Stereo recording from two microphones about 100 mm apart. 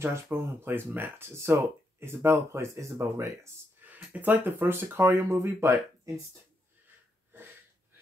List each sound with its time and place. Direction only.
0.0 s speech: 25° right (ahead or behind)
3.8 s speech: 15° right (ahead or behind)